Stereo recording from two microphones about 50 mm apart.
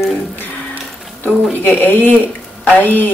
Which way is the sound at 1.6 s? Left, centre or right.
Left.